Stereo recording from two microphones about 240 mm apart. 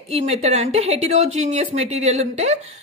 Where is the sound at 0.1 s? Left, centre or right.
Right.